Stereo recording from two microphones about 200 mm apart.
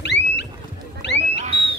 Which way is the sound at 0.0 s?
60° left (ahead or behind).